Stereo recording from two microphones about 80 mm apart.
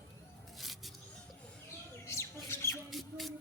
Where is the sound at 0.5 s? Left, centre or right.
Centre.